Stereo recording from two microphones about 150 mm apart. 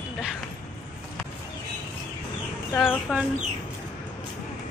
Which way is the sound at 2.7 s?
15° left (ahead or behind).